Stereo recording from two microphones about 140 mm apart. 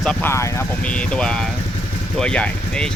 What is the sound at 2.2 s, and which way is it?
Speech, 5° left (ahead or behind).